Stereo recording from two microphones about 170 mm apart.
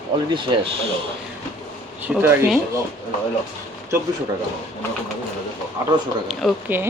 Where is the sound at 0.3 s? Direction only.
30° right (ahead or behind).